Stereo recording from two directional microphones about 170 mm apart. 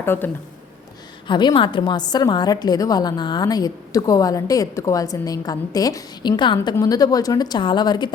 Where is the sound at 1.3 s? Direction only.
25° left (ahead or behind).